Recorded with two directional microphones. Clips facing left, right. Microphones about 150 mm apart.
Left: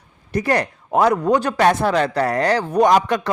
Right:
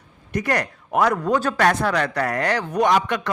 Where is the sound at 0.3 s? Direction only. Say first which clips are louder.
Left 4 dB; 30° left (ahead or behind).